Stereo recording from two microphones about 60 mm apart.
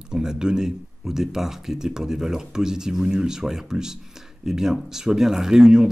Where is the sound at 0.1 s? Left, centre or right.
Centre.